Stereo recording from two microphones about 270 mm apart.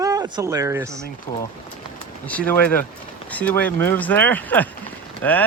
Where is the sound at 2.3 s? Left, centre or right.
Centre.